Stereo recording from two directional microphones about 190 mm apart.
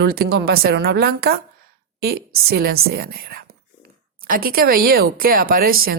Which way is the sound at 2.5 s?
50° right (ahead or behind).